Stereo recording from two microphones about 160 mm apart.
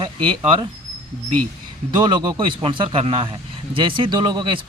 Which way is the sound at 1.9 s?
30° right (ahead or behind).